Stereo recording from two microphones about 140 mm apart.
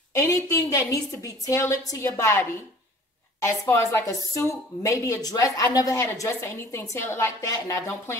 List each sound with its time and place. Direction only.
0.1 s a woman's voice: 20° left (ahead or behind)